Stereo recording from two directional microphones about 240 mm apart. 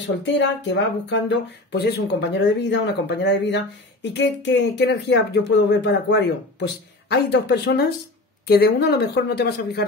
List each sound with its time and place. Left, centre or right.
0.2 s speech: left